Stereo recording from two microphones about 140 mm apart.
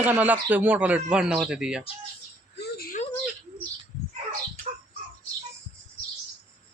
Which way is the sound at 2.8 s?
85° left.